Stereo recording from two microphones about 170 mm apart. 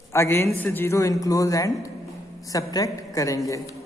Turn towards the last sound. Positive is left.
turn(degrees=20)  # may be behind; listen again after turning